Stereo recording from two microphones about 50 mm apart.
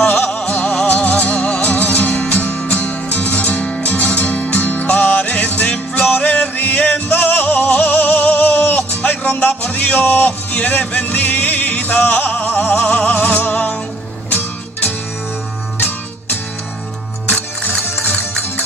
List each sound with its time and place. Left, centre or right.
0.0 s music: left
17.3 s music: left